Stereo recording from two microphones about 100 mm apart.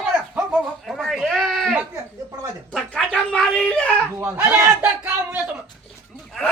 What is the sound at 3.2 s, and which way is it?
Speech, 5° left (ahead or behind).